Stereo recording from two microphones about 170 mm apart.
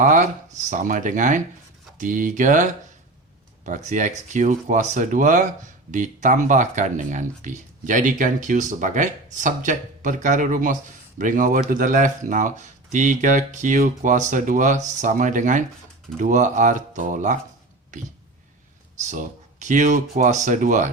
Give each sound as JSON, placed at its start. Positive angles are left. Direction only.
{"t": 0.0, "sound": "speech", "side_deg": -45}
{"t": 3.7, "sound": "speech", "side_deg": -45}
{"t": 19.0, "sound": "speech", "side_deg": -45}